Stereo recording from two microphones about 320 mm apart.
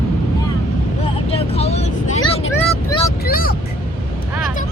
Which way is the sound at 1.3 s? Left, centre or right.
Centre.